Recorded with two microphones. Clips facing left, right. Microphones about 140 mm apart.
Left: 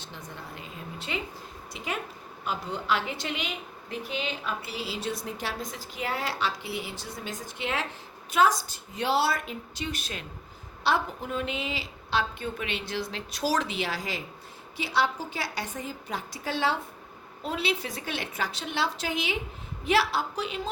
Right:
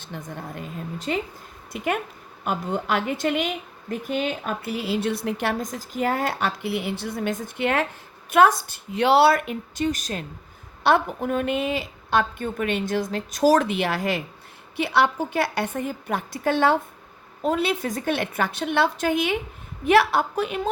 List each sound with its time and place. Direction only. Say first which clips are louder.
0.0 s a woman's voice: right 7 dB; 50° right (ahead or behind)
1.7 s a woman's voice: right 8 dB; 55° right (ahead or behind)
10.8 s a woman's voice: right 7 dB; 55° right (ahead or behind)